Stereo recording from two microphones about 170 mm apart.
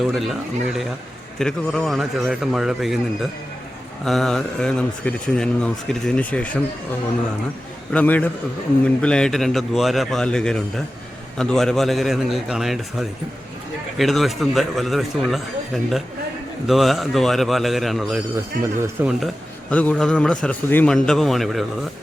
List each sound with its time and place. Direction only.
0.0 s speech: centre (ahead or behind)
4.0 s speech: centre (ahead or behind)
7.9 s a man's voice: 10° left (ahead or behind)
18.6 s speech: 10° right (ahead or behind)
19.7 s speech: 10° left (ahead or behind)